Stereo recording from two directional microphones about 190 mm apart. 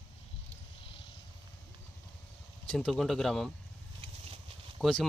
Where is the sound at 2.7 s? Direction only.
5° left (ahead or behind).